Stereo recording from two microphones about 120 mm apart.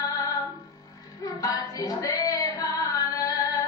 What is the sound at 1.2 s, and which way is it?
Female singing, 30° left (ahead or behind).